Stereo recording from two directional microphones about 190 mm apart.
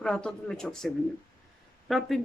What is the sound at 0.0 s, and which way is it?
Speech, 5° left (ahead or behind).